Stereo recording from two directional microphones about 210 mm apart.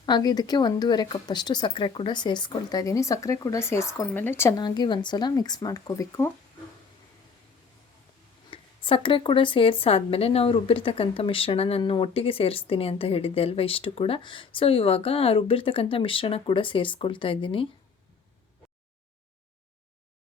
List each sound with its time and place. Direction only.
0.0 s a woman's voice: 20° left (ahead or behind)
8.4 s a woman's voice: 25° left (ahead or behind)